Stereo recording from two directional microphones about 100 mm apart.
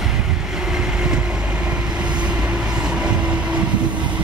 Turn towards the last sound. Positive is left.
turn(degrees=-10)  # may be behind; listen again after turning